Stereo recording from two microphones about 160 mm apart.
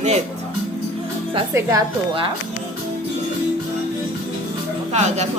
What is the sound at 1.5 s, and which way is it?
Speech, 20° right (ahead or behind).